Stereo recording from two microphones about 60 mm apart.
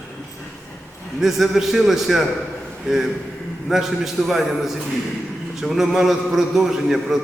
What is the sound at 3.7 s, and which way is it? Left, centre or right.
A man's voice, centre.